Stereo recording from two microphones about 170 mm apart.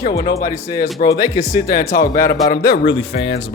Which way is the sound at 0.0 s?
20° left (ahead or behind).